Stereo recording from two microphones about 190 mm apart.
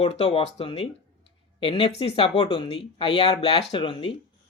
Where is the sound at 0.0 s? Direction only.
30° left (ahead or behind).